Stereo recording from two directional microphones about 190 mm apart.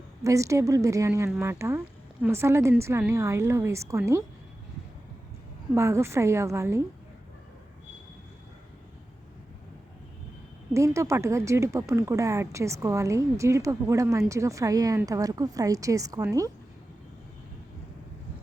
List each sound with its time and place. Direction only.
0.3 s speech: 15° right (ahead or behind)
5.7 s speech: 15° right (ahead or behind)
10.8 s speech: 15° right (ahead or behind)